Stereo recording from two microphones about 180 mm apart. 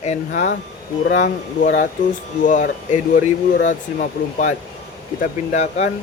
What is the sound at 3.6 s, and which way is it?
Speech, 45° left (ahead or behind).